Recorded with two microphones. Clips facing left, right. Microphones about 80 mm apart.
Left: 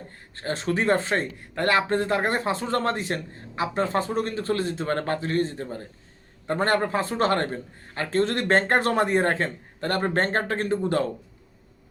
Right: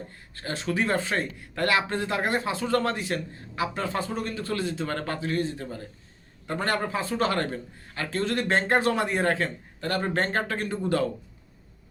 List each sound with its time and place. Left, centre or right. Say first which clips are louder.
0.4 s speech: left 4 dB; left